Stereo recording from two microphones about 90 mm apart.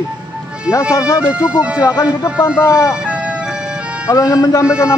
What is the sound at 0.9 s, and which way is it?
Speech, 40° left (ahead or behind).